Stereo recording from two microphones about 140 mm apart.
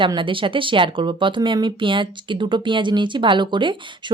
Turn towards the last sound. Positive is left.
turn(degrees=-35)  # may be behind; listen again after turning